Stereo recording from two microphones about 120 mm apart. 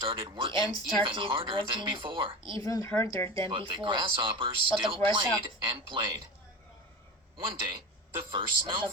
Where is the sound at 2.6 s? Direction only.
25° left (ahead or behind).